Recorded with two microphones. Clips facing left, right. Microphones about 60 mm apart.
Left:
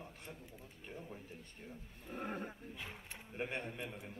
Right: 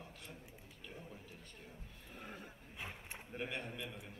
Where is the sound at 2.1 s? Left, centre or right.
Left.